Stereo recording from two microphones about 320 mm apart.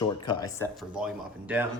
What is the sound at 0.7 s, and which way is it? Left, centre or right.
Speech, centre.